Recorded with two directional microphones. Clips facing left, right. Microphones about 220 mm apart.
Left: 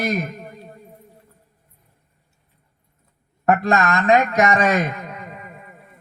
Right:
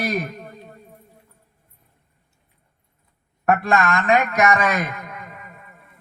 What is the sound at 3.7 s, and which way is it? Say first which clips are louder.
A man's voice: left 2 dB; 40° left (ahead or behind).